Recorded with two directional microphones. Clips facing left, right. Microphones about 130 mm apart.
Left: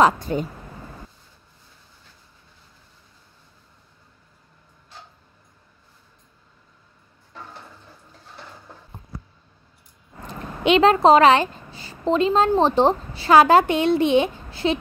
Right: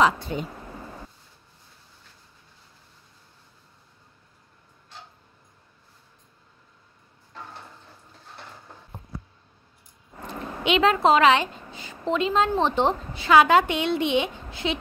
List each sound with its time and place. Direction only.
0.0 s speech: 45° left (ahead or behind)
10.6 s a woman's voice: 40° left (ahead or behind)